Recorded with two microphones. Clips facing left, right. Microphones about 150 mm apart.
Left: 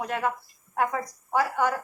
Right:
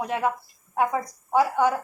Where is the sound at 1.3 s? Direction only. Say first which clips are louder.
Right 4 dB; 20° right (ahead or behind).